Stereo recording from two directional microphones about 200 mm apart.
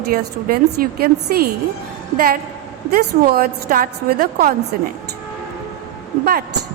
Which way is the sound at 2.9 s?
50° right (ahead or behind).